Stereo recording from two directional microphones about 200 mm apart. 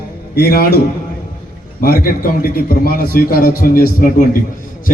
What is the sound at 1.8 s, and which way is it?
A man's voice, 50° left (ahead or behind).